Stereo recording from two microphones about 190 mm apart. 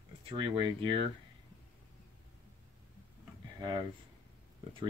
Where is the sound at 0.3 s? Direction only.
25° right (ahead or behind).